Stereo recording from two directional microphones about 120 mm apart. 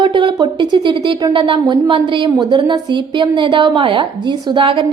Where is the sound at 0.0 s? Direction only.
40° right (ahead or behind).